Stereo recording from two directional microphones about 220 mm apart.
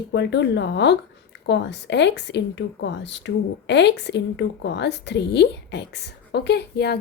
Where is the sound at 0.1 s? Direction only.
50° left (ahead or behind).